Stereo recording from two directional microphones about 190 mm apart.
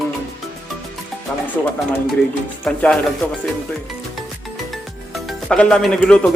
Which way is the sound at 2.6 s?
5° left (ahead or behind).